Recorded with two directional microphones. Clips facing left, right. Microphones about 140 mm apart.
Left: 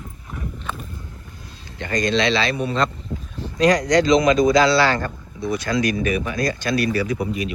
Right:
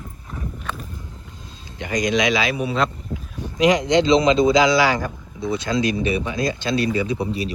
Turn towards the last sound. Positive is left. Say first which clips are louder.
# even
turn(degrees=-30)  # may be behind; listen again after turning